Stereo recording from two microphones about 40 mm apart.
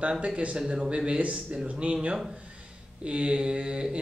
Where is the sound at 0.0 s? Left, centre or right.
Right.